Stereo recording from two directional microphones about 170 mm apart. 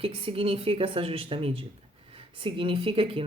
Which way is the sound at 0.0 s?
35° right (ahead or behind).